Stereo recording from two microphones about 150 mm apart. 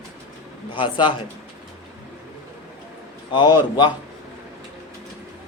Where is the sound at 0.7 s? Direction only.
35° left (ahead or behind).